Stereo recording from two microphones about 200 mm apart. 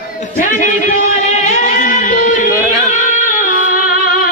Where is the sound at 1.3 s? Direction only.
35° left (ahead or behind).